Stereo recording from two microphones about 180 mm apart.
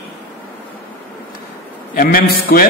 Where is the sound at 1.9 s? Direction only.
55° left (ahead or behind).